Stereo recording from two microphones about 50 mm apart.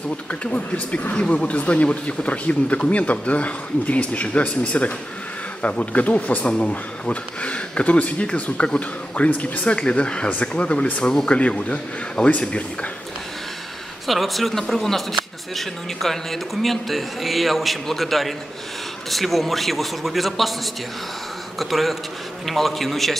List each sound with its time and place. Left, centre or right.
0.3 s speech: left
14.0 s speech: centre
21.5 s speech: centre